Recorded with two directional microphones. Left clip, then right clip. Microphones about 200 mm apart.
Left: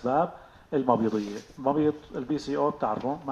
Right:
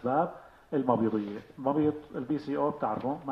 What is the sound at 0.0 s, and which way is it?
Speech, 40° left (ahead or behind).